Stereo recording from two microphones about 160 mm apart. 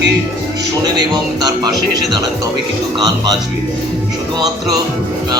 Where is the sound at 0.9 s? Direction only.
25° right (ahead or behind).